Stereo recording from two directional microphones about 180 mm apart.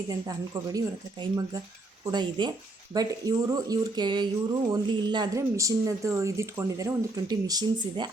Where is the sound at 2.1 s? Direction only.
25° right (ahead or behind).